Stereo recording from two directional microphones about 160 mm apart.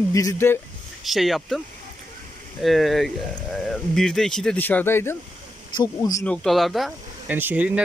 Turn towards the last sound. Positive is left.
turn(degrees=-10)  # may be behind; listen again after turning